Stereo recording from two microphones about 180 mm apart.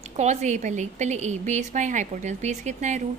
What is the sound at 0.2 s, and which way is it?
A woman's voice, 40° right (ahead or behind).